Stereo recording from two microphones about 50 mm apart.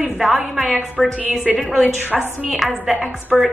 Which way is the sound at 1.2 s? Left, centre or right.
Right.